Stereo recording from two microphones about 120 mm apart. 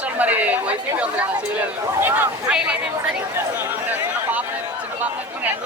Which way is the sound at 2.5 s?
10° right (ahead or behind).